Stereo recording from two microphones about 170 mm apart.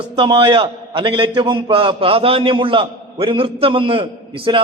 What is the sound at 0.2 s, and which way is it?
A man's voice, 30° right (ahead or behind).